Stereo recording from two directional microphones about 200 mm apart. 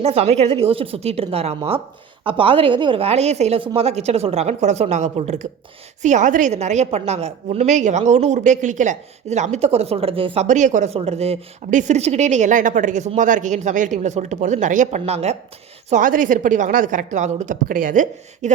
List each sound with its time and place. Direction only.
0.0 s a woman's voice: 30° right (ahead or behind)